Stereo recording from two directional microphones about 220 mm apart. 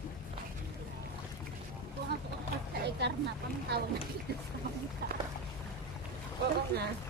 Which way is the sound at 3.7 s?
45° right (ahead or behind).